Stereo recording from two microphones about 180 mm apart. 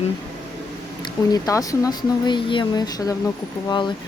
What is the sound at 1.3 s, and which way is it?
Speech, 20° left (ahead or behind).